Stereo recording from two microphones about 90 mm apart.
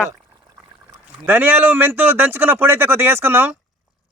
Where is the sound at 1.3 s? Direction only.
25° right (ahead or behind).